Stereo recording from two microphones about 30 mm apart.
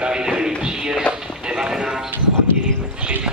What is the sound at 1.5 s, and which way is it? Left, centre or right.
Speech, centre.